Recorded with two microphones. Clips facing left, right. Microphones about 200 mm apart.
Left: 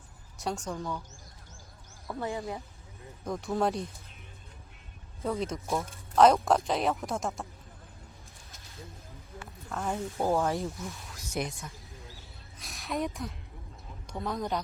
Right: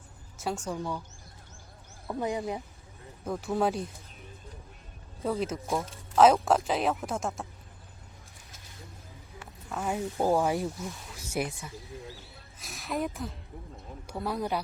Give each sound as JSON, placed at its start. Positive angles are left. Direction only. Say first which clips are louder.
{"t": 0.3, "sound": "speech", "louder": "right 1 dB", "side_deg": 0}
{"t": 2.0, "sound": "speech", "louder": "right 3 dB", "side_deg": -15}
{"t": 3.2, "sound": "speech", "louder": "right 1 dB", "side_deg": -5}
{"t": 5.2, "sound": "speech", "louder": "right 2 dB", "side_deg": -5}
{"t": 9.6, "sound": "snake", "louder": "right 1 dB", "side_deg": -5}
{"t": 9.9, "sound": "speech", "louder": "right 2 dB", "side_deg": -15}
{"t": 11.1, "sound": "a sound", "louder": "right 2 dB", "side_deg": -5}
{"t": 14.1, "sound": "speech", "louder": "right 1 dB", "side_deg": -5}